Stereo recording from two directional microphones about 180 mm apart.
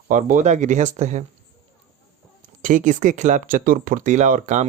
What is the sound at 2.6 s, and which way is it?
Speech, 45° right (ahead or behind).